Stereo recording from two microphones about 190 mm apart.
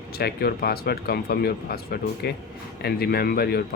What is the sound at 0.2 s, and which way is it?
Speech, 55° left (ahead or behind).